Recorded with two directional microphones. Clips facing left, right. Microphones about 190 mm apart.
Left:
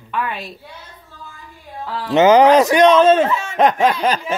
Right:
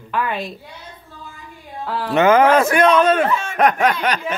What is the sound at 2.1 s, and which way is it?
Speech, 20° left (ahead or behind).